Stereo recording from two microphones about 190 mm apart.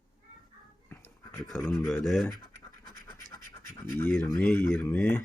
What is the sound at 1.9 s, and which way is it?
Speech, centre (ahead or behind).